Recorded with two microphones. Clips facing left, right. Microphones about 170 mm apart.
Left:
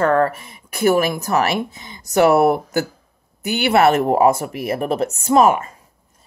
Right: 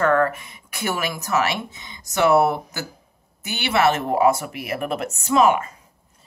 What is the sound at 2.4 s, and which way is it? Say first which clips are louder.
Speech: left 6 dB; 50° left (ahead or behind).